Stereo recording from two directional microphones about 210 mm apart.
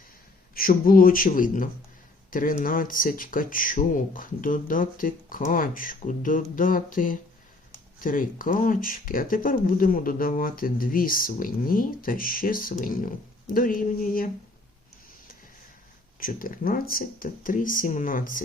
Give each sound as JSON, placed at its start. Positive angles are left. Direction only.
{"t": 0.5, "sound": "speech", "side_deg": 45}
{"t": 16.2, "sound": "speech", "side_deg": 40}